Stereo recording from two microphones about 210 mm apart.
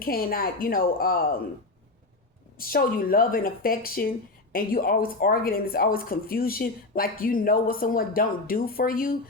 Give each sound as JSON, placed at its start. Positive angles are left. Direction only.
{"t": 0.0, "sound": "speech", "side_deg": 45}
{"t": 2.6, "sound": "speech", "side_deg": 45}